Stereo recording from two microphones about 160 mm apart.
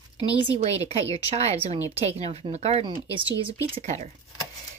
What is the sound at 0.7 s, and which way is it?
Speech, 40° right (ahead or behind).